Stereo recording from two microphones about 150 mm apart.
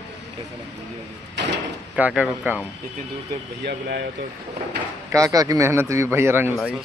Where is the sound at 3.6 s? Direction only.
90° right.